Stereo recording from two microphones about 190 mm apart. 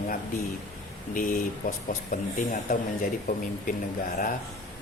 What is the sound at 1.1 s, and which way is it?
Speech, 45° left (ahead or behind).